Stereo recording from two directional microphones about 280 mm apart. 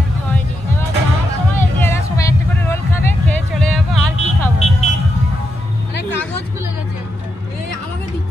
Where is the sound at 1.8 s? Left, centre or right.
Centre.